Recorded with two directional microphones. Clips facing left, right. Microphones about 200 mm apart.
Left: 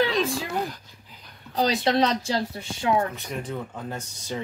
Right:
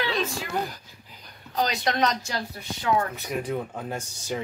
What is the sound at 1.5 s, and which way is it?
Speech, 35° left (ahead or behind).